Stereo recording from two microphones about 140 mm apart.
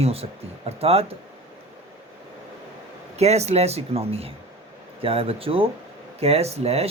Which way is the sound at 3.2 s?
50° right (ahead or behind).